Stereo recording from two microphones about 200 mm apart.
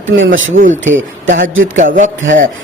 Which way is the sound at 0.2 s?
70° right (ahead or behind).